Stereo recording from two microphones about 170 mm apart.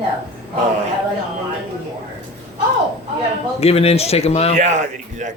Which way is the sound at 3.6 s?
35° left (ahead or behind).